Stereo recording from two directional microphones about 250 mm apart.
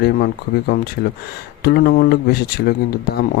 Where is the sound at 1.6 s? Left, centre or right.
Left.